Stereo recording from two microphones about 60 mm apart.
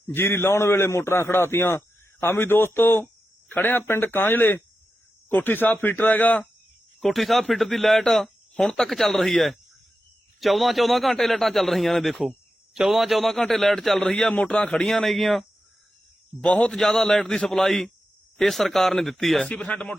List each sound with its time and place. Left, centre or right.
0.1 s a man's voice: left
7.0 s a man's voice: centre
16.4 s a man's voice: centre
19.5 s speech: left